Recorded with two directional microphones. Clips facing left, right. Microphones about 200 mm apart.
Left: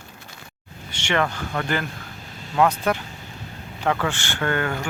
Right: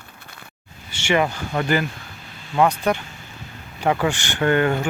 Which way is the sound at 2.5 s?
Centre (ahead or behind).